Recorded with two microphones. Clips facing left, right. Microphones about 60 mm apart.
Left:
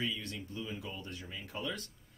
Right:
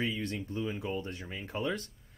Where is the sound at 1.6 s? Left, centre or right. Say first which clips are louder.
Right 6 dB; right.